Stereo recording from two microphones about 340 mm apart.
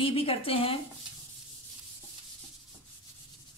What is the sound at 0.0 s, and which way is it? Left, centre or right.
Speech, centre.